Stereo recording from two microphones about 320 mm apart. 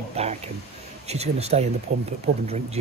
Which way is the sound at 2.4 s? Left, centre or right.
Centre.